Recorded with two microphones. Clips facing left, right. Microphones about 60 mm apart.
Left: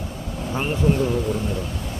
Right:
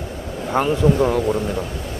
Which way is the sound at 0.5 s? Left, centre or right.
Right.